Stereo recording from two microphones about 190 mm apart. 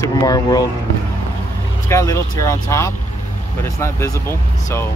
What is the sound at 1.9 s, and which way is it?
Speech, 15° left (ahead or behind).